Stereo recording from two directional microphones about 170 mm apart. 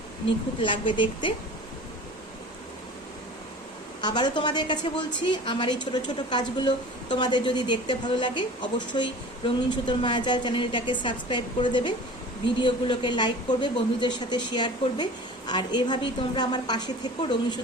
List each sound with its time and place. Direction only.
0.6 s a woman's voice: 30° left (ahead or behind)
4.0 s a woman's voice: 25° left (ahead or behind)